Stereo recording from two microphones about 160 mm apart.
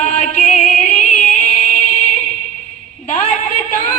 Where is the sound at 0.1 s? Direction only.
45° left (ahead or behind).